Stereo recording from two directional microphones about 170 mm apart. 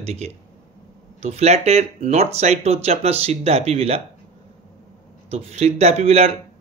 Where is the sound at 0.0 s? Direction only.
40° right (ahead or behind).